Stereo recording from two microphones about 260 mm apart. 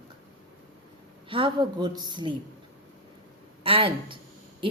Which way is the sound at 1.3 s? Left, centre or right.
Centre.